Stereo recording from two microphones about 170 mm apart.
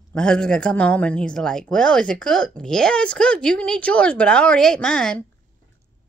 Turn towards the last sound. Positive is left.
turn(degrees=5)  # may be behind; listen again after turning